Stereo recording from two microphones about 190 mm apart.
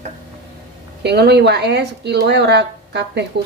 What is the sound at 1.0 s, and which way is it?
Speech, 60° right (ahead or behind).